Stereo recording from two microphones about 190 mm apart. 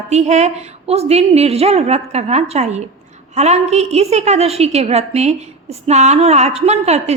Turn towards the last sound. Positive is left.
turn(degrees=-35)  # may be behind; listen again after turning